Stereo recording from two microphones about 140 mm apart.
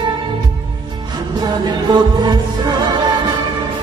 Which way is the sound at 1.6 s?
30° right (ahead or behind).